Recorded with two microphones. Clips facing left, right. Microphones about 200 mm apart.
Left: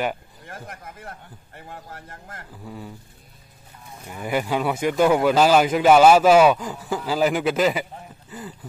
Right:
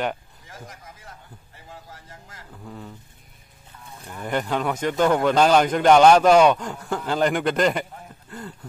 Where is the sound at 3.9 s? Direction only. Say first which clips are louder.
Left 1 dB; 10° left (ahead or behind).